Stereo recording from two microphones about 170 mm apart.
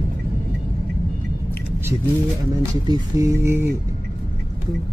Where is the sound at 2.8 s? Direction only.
15° right (ahead or behind).